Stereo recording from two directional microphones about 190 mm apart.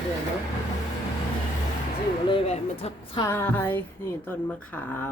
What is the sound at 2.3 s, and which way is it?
Speech, 30° left (ahead or behind).